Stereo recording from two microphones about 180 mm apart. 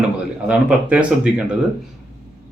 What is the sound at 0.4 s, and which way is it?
Speech, 5° right (ahead or behind).